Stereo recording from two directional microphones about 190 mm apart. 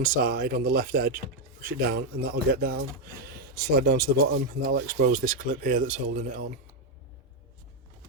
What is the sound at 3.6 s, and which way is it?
Speech, 55° right (ahead or behind).